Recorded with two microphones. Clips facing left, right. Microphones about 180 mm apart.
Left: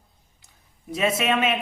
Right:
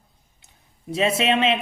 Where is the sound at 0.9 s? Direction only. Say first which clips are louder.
Right 2 dB; 30° right (ahead or behind).